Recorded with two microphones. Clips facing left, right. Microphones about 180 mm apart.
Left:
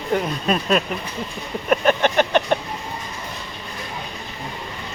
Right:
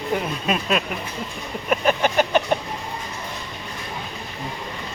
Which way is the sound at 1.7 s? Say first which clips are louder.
Left 2 dB; 5° right (ahead or behind).